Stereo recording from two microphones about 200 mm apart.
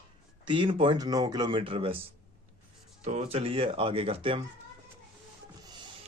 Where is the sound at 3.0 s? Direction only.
30° right (ahead or behind).